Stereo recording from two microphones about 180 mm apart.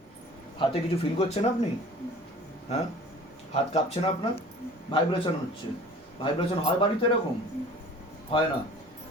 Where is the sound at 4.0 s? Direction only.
30° left (ahead or behind).